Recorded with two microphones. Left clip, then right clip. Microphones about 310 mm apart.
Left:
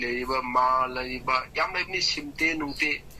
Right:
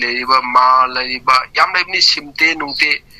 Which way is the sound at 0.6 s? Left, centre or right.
Right.